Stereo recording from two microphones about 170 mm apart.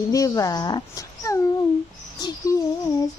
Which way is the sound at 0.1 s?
20° left (ahead or behind).